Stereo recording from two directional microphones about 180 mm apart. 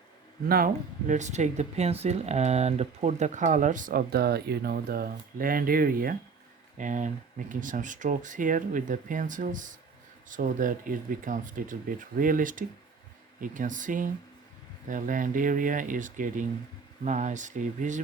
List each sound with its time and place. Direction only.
0.4 s speech: 55° right (ahead or behind)